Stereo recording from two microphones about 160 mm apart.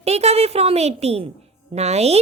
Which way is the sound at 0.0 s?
40° right (ahead or behind).